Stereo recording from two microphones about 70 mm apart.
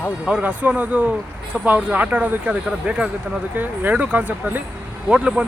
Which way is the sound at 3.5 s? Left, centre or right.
Right.